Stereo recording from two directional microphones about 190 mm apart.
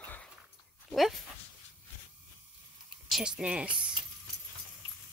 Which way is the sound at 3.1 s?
5° right (ahead or behind).